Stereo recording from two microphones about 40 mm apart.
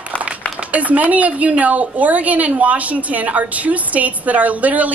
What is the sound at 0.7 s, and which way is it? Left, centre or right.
A woman's voice, right.